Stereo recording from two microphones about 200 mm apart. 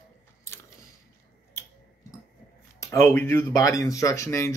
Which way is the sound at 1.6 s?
15° left (ahead or behind).